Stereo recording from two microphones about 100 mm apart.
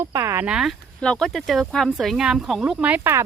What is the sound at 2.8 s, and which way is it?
Speech, 15° right (ahead or behind).